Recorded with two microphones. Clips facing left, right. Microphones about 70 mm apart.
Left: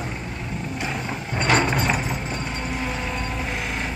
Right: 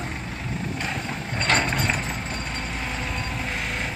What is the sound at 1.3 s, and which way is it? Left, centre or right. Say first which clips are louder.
Ratchet: left 3 dB; centre.